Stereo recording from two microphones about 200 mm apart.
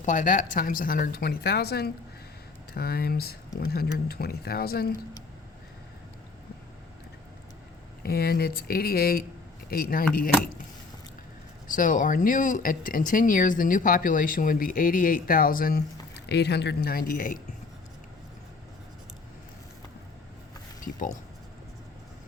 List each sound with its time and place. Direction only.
0.0 s speech: 40° left (ahead or behind)
8.0 s speech: 50° left (ahead or behind)
11.7 s speech: 40° left (ahead or behind)